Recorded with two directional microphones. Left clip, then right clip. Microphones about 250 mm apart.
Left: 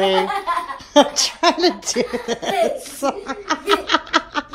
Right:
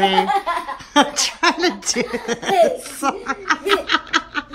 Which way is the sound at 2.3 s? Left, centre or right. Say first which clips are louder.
Right 7 dB; centre.